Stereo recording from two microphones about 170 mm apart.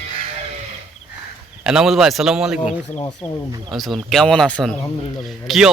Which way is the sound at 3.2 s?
40° left (ahead or behind).